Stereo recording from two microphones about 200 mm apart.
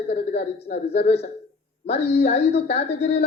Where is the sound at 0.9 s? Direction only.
30° left (ahead or behind).